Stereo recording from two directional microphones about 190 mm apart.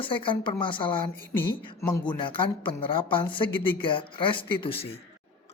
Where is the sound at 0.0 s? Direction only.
25° left (ahead or behind).